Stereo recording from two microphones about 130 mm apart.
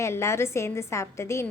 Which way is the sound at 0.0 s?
20° left (ahead or behind).